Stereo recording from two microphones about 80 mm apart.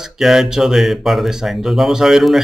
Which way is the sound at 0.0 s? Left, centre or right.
Centre.